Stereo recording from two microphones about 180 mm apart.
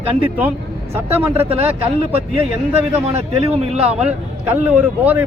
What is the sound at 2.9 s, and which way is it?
A man's voice, 35° right (ahead or behind).